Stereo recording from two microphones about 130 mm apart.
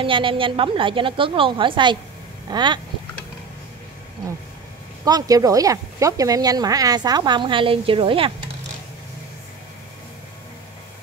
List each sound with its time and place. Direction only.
0.0 s a woman's voice: 40° right (ahead or behind)
5.0 s speech: 30° right (ahead or behind)